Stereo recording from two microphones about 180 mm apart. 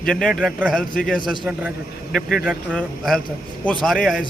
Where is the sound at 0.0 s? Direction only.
5° left (ahead or behind).